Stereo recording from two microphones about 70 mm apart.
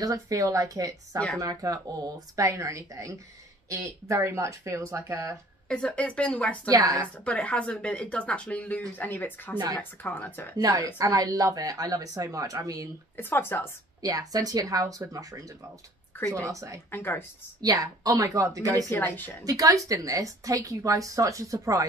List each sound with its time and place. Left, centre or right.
0.0 s a woman's voice: right
5.7 s speech: centre
6.7 s a woman's voice: right
7.0 s speech: centre
11.0 s a woman's voice: right
13.1 s speech: left
14.0 s a woman's voice: right
16.9 s speech: left
17.6 s a woman's voice: right
18.9 s speech: left
19.4 s a woman's voice: right